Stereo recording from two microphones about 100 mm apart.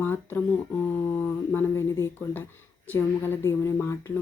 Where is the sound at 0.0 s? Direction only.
20° left (ahead or behind).